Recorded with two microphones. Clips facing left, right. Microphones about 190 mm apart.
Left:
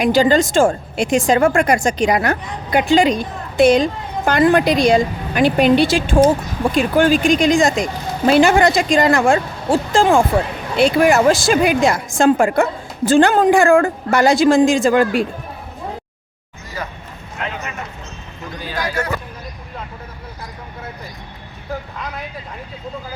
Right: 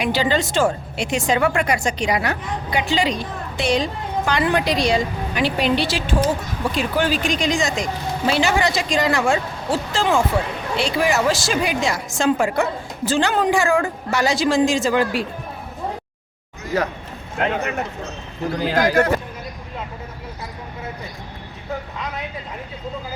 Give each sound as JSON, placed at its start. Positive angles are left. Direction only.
{"t": 0.0, "sound": "a woman's voice", "side_deg": 45}
{"t": 17.3, "sound": "speech", "side_deg": -55}
{"t": 18.9, "sound": "speech", "side_deg": -45}